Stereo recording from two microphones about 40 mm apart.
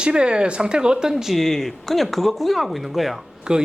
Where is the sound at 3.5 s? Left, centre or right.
Right.